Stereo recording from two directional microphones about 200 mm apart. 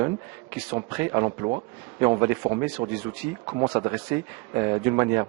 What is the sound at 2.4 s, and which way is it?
Speech, 25° right (ahead or behind).